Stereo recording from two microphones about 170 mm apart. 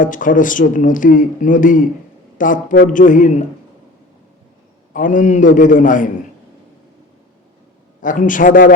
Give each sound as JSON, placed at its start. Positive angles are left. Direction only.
{"t": 0.0, "sound": "speech", "side_deg": 50}
{"t": 4.9, "sound": "speech", "side_deg": 50}
{"t": 8.0, "sound": "speech", "side_deg": 50}